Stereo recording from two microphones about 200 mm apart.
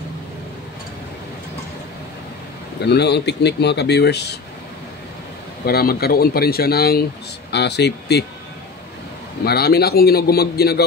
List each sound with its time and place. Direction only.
2.8 s speech: 55° left (ahead or behind)
5.7 s a man's voice: 50° left (ahead or behind)
9.4 s a man's voice: 50° left (ahead or behind)